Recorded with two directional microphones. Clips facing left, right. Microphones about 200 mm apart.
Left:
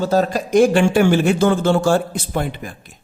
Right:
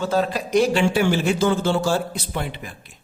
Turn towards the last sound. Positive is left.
turn(degrees=45)  # may be behind; listen again after turning